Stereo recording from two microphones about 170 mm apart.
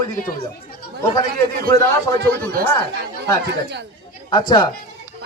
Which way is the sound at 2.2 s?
70° right (ahead or behind).